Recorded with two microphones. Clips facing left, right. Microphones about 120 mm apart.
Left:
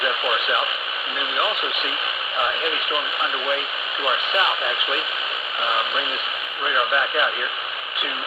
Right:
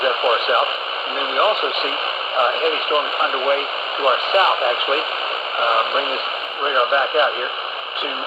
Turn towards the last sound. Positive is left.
turn(degrees=-30)  # may be behind; listen again after turning